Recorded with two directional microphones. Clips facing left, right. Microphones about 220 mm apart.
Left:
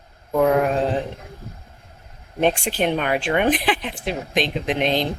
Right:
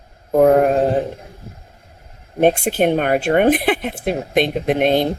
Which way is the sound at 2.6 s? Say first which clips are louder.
Right 5 dB; 45° right (ahead or behind).